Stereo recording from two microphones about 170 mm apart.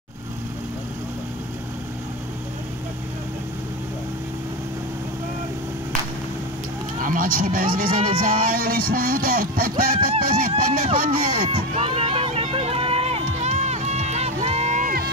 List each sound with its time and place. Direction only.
7.0 s speech: 55° right (ahead or behind)
11.5 s run: 35° right (ahead or behind); by 15.0 s 50° right (ahead or behind)